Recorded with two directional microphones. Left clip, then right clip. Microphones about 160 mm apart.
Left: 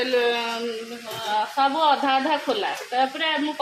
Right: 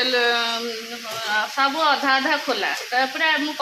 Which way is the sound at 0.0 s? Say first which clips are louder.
Right 2 dB; 20° left (ahead or behind).